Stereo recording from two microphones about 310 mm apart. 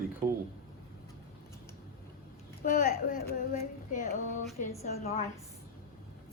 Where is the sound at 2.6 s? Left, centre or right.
Left.